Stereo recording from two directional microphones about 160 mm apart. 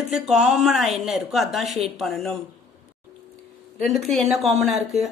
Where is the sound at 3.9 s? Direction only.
Centre (ahead or behind).